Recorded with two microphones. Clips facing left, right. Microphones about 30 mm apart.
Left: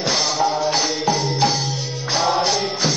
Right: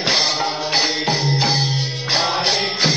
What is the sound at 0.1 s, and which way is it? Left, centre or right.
Music, right.